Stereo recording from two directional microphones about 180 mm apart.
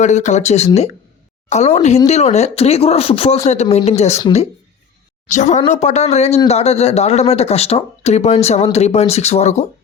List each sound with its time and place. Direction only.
0.0 s speech: 40° left (ahead or behind)
5.3 s speech: 40° left (ahead or behind)